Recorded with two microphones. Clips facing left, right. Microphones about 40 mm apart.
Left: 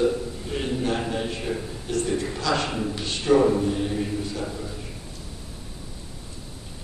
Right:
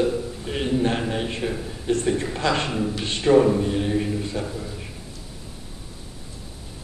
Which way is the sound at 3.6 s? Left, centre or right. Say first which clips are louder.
Right 2 dB; right.